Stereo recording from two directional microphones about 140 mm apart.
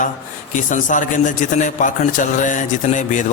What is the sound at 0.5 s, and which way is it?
A man's voice, 65° left (ahead or behind).